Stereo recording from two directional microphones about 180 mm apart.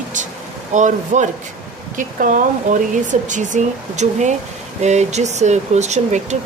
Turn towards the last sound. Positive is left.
turn(degrees=-40)  # may be behind; listen again after turning